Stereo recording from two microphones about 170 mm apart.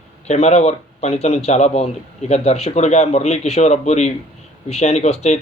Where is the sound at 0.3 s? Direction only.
40° left (ahead or behind).